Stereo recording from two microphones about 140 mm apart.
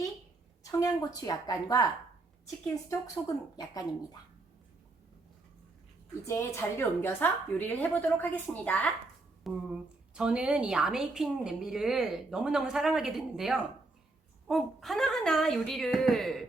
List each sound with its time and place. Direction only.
0.6 s a woman's voice: 25° left (ahead or behind)
3.6 s a woman's voice: 30° left (ahead or behind)
6.2 s a woman's voice: 20° left (ahead or behind)
9.5 s speech: centre (ahead or behind)